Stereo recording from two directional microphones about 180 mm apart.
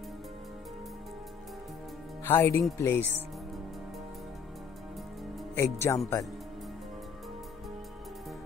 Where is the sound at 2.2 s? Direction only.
15° left (ahead or behind).